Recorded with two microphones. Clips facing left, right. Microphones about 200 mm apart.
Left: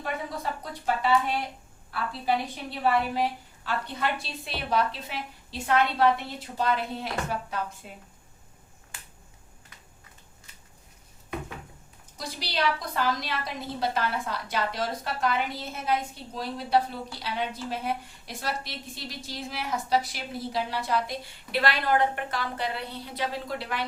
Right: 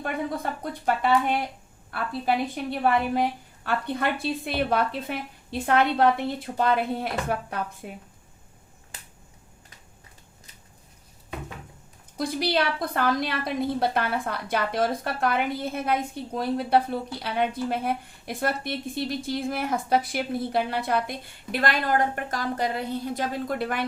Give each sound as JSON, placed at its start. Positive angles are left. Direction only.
{"t": 0.6, "sound": "a woman's voice", "side_deg": -55}
{"t": 12.1, "sound": "a woman's voice", "side_deg": -55}